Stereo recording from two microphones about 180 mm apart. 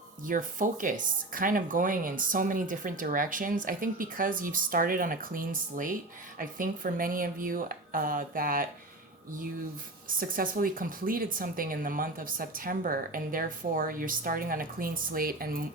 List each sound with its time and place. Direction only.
0.3 s speech: 45° right (ahead or behind)
10.2 s speech: 50° right (ahead or behind)